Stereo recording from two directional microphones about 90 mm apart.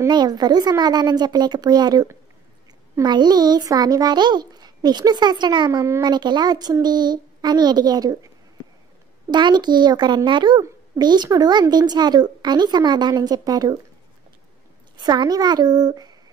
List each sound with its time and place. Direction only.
0.1 s a child's voice: 50° right (ahead or behind)
9.3 s a child's voice: 55° right (ahead or behind)
15.0 s a child's voice: 50° right (ahead or behind)